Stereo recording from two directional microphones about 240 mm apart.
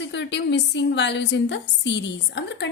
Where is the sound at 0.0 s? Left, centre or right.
Left.